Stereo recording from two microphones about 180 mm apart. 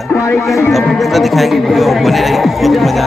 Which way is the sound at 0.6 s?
Centre (ahead or behind).